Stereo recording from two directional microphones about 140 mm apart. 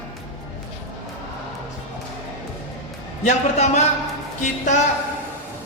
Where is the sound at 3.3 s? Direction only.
55° left (ahead or behind).